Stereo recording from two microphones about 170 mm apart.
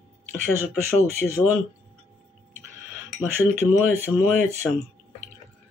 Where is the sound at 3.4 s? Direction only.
15° left (ahead or behind).